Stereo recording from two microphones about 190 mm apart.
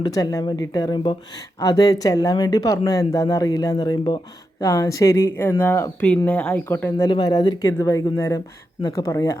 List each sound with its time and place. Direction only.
0.0 s speech: 20° left (ahead or behind)
7.1 s speech: 20° left (ahead or behind)